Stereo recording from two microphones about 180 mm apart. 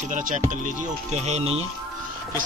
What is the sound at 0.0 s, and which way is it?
Speech, 45° right (ahead or behind).